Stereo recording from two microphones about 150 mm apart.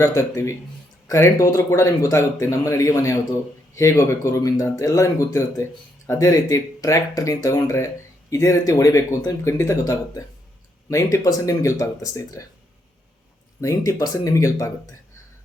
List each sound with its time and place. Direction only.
0.0 s speech: 20° left (ahead or behind)
13.6 s speech: 20° left (ahead or behind)